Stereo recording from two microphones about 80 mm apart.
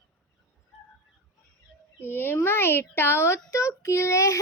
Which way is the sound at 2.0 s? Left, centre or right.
Left.